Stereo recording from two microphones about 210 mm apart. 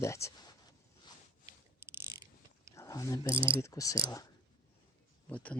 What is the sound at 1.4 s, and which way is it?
Ratchet, 10° right (ahead or behind).